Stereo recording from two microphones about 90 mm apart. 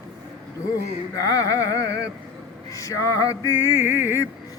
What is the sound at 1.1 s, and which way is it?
Music, 40° left (ahead or behind).